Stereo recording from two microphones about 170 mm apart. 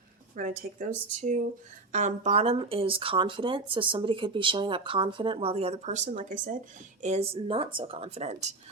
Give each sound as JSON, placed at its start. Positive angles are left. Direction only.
{"t": 0.3, "sound": "speech", "side_deg": -50}
{"t": 7.0, "sound": "speech", "side_deg": -40}